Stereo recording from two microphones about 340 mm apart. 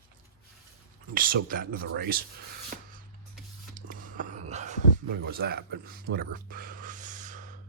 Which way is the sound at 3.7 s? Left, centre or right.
Right.